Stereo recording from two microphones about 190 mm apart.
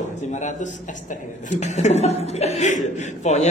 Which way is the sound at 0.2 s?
40° left (ahead or behind).